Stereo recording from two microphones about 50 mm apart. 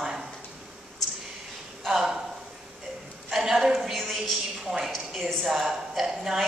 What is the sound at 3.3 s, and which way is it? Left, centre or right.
A woman's voice, centre.